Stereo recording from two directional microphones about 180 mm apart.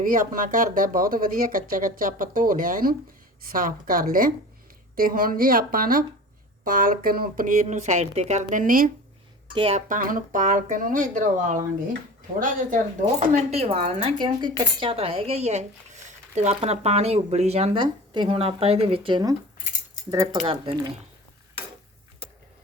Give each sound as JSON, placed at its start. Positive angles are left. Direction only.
{"t": 0.0, "sound": "speech", "side_deg": -50}
{"t": 9.6, "sound": "speech", "side_deg": -30}
{"t": 9.9, "sound": "speech", "side_deg": -50}